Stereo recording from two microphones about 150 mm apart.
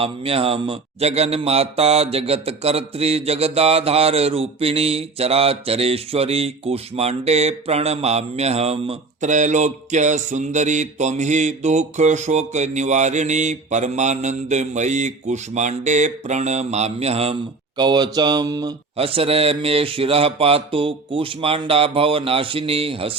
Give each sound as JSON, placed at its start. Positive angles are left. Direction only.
{"t": 0.0, "sound": "a man's voice", "side_deg": -40}
{"t": 17.7, "sound": "speech", "side_deg": -30}
{"t": 18.9, "sound": "speech", "side_deg": -40}